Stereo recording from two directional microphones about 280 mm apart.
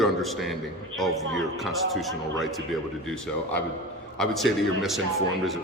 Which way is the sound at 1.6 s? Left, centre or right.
Centre.